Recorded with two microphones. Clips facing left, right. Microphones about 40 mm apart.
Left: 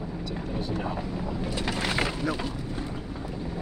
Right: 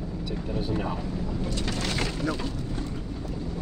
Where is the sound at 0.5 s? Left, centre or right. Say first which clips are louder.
Right 2 dB; centre.